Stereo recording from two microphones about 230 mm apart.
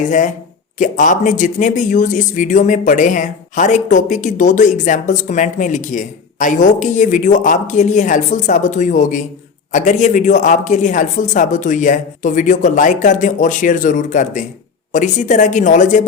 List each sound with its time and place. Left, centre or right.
0.0 s speech: left